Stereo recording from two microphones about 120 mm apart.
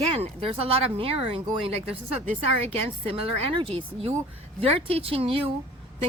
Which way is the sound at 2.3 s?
60° right (ahead or behind).